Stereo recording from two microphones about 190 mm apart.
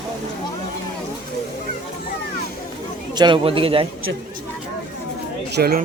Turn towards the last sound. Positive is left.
turn(degrees=-55)  # may be behind; listen again after turning